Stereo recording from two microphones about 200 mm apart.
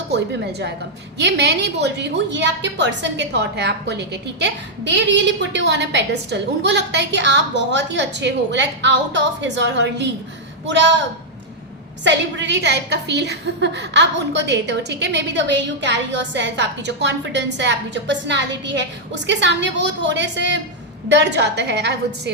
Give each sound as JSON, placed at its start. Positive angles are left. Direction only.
{"t": 1.2, "sound": "a woman's voice", "side_deg": -60}
{"t": 12.0, "sound": "a woman's voice", "side_deg": -60}